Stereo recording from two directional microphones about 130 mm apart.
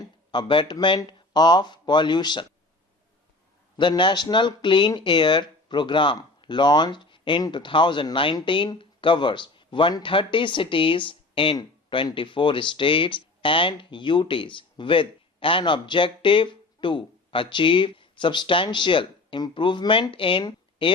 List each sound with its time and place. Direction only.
0.3 s speech: 35° left (ahead or behind)
3.8 s speech: 40° left (ahead or behind)